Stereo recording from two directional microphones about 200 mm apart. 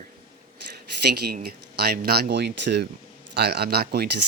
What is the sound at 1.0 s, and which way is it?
Speech, 55° right (ahead or behind).